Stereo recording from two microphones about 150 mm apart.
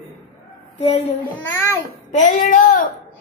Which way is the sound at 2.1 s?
55° left (ahead or behind).